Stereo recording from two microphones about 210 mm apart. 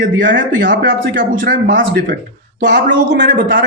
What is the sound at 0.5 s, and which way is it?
Speech, 60° right (ahead or behind).